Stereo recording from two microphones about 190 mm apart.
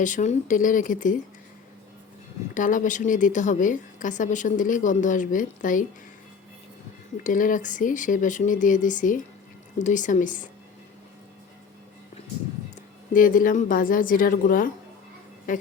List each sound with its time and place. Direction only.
0.0 s speech: 40° left (ahead or behind)
2.6 s speech: 45° left (ahead or behind)
7.3 s speech: 45° left (ahead or behind)
13.1 s a woman's voice: 45° left (ahead or behind)